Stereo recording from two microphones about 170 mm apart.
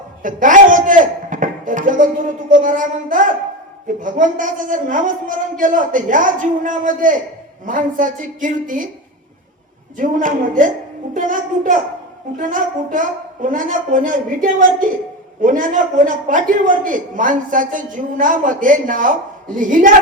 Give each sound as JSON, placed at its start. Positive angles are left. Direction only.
{"t": 0.2, "sound": "a man's voice", "side_deg": -50}
{"t": 10.0, "sound": "a man's voice", "side_deg": -50}